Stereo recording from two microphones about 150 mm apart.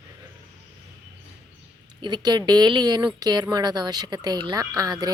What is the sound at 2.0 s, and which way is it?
Speech, 30° right (ahead or behind).